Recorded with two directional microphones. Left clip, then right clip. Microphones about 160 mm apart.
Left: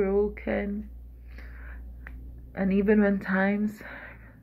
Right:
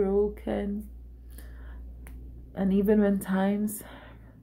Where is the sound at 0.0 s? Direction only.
35° right (ahead or behind).